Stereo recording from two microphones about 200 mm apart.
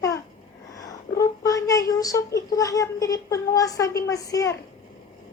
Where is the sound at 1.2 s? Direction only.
15° left (ahead or behind).